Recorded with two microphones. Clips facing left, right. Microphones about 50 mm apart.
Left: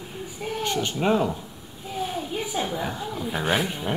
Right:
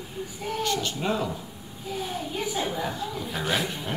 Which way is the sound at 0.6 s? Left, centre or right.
Left.